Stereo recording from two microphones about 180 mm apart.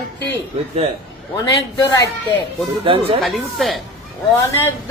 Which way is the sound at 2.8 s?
30° right (ahead or behind).